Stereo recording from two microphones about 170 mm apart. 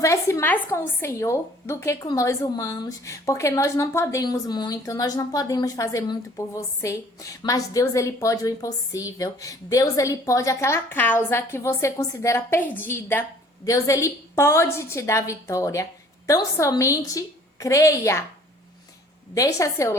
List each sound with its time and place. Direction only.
0.0 s a woman's voice: 15° left (ahead or behind)
19.3 s a woman's voice: 20° left (ahead or behind)